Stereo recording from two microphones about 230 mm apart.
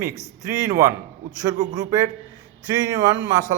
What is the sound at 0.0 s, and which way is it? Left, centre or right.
Speech, centre.